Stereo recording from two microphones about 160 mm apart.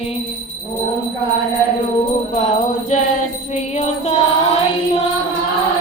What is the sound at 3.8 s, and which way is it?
Mantra, 40° left (ahead or behind).